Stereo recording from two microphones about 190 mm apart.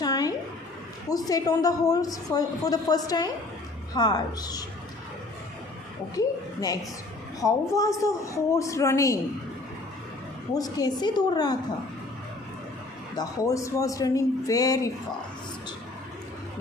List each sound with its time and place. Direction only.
0.0 s a sound: 20° left (ahead or behind)
1.0 s a woman's voice: 20° left (ahead or behind)
6.1 s a woman's voice: 20° left (ahead or behind)
10.5 s a woman's voice: 20° left (ahead or behind)
13.1 s a woman's voice: 15° left (ahead or behind)